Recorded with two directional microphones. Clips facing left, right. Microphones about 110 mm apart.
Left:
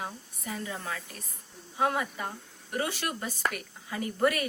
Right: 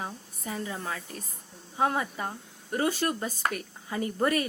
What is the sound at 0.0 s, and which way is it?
Speech, 30° right (ahead or behind).